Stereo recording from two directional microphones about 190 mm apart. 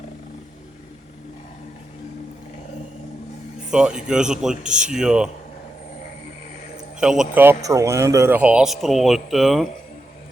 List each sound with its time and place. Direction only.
3.7 s a man's voice: 5° right (ahead or behind)
4.6 s speech: 40° right (ahead or behind)
4.9 s a man's voice: 5° right (ahead or behind)
7.0 s a man's voice: 5° right (ahead or behind)